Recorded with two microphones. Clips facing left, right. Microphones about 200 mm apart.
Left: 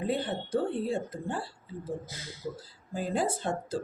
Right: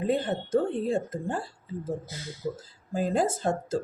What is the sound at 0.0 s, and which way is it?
Speech, 45° right (ahead or behind).